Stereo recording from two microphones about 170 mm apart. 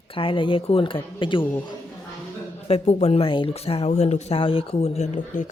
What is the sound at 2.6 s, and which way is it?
Speech, 40° left (ahead or behind).